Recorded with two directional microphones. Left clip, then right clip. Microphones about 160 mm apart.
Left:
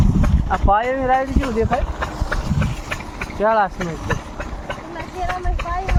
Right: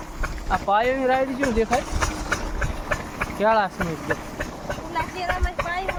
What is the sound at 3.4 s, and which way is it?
Speech, 45° left (ahead or behind).